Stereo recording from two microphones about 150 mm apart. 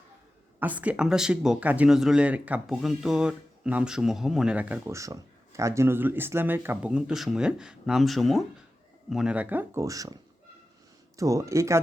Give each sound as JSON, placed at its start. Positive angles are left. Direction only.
{"t": 0.6, "sound": "speech", "side_deg": -10}
{"t": 11.2, "sound": "speech", "side_deg": -20}